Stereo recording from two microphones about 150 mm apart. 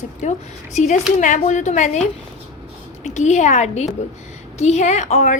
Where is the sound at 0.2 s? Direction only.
50° left (ahead or behind).